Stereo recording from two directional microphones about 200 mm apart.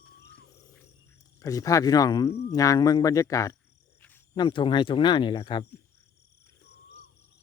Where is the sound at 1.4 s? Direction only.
15° left (ahead or behind).